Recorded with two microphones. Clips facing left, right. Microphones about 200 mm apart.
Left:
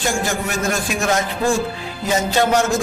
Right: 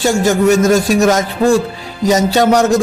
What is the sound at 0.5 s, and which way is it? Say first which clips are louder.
Speech: right 11 dB; 40° right (ahead or behind).